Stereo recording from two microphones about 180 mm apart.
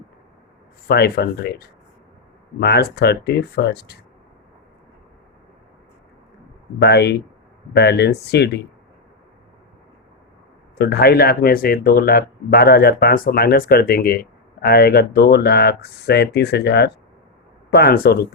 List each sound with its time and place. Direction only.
0.9 s speech: 65° left (ahead or behind)
6.8 s speech: 65° left (ahead or behind)
10.8 s speech: 60° left (ahead or behind)